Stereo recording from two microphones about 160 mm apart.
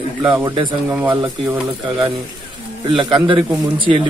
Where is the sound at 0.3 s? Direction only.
25° right (ahead or behind).